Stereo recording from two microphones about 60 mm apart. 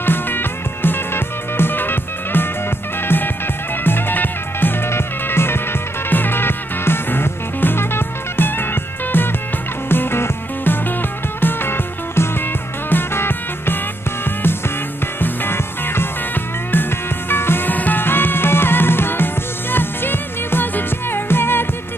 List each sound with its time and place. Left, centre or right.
0.0 s music: left
3.8 s music: left